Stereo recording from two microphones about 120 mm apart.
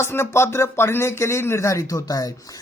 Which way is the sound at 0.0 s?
20° left (ahead or behind).